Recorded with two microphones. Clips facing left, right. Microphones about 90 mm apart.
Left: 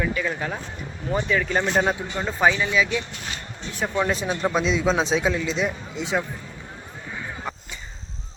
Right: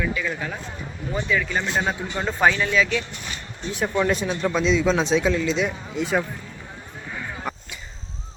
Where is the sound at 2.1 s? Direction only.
5° left (ahead or behind).